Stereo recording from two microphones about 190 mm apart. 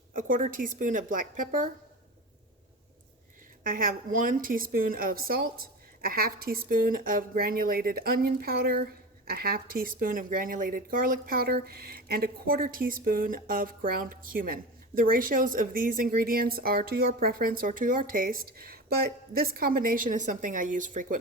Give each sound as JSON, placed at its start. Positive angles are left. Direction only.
{"t": 0.1, "sound": "a woman's voice", "side_deg": -45}
{"t": 3.6, "sound": "a woman's voice", "side_deg": -50}